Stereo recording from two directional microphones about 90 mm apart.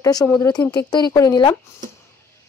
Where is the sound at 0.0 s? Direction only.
45° left (ahead or behind).